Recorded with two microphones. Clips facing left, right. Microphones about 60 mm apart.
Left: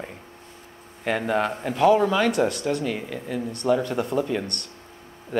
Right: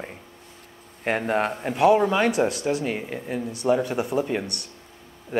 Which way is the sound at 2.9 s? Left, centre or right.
Right.